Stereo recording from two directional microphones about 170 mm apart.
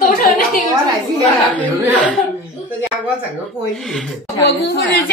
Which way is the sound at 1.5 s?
10° left (ahead or behind).